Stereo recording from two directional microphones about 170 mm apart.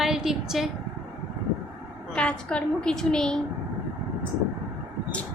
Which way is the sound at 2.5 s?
5° left (ahead or behind).